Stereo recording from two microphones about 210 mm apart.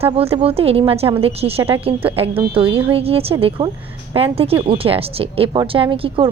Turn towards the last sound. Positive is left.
turn(degrees=-25)  # may be behind; listen again after turning